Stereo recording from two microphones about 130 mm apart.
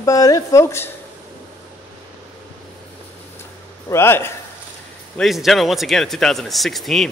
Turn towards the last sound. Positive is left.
turn(degrees=0)  # may be behind; listen again after turning